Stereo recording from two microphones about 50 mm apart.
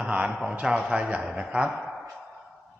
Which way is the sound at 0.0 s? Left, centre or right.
Right.